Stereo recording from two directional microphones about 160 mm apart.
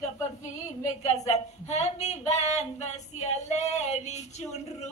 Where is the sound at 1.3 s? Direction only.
45° left (ahead or behind).